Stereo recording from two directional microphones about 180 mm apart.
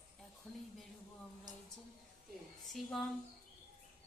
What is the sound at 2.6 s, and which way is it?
Speech, centre (ahead or behind).